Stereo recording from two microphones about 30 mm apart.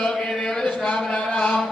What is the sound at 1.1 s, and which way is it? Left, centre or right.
Mantra, left.